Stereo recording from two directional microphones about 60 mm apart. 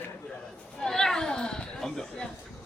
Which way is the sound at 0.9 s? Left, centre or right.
Centre.